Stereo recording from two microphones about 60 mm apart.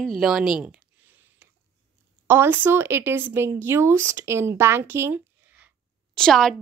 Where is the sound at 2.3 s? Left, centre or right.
Right.